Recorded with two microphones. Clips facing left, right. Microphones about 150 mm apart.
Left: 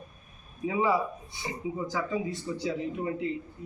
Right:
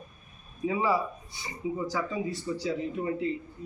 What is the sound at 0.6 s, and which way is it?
Speech, 15° left (ahead or behind).